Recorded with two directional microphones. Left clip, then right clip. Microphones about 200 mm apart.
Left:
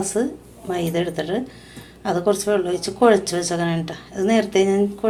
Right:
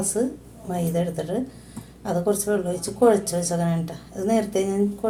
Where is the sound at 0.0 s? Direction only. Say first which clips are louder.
Left 3 dB; 10° left (ahead or behind).